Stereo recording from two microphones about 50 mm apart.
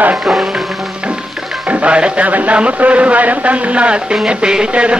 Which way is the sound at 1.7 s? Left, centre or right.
Right.